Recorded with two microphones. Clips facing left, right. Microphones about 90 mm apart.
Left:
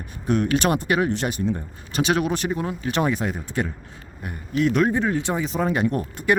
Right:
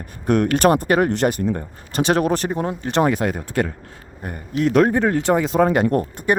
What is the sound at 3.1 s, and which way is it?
Speech, 60° right (ahead or behind).